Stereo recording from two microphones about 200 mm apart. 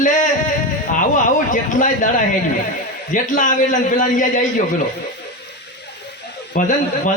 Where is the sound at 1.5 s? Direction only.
40° left (ahead or behind).